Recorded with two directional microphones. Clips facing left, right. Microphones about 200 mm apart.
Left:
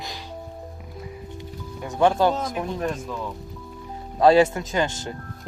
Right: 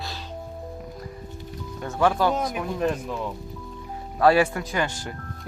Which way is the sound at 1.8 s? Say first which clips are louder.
Left 2 dB; 20° left (ahead or behind).